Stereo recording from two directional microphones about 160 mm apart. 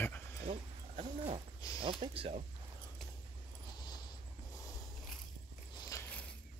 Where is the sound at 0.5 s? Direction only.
40° right (ahead or behind).